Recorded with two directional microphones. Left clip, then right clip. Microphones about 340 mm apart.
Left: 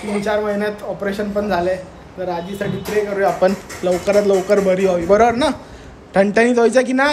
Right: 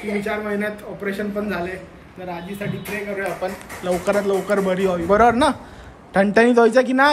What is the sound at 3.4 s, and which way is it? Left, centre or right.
Speech, left.